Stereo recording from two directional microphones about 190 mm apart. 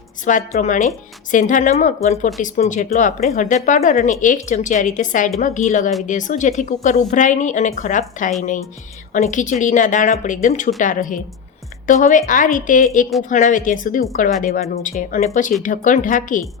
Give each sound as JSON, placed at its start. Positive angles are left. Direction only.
{"t": 0.3, "sound": "a woman's voice", "side_deg": 40}